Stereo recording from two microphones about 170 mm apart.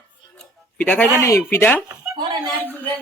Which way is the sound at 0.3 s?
5° left (ahead or behind).